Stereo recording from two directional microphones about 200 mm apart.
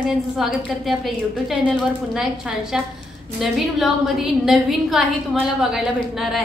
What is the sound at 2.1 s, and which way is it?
A woman's voice, centre (ahead or behind).